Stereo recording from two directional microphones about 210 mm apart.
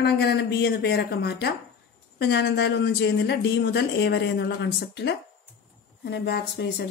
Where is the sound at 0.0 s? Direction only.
50° left (ahead or behind).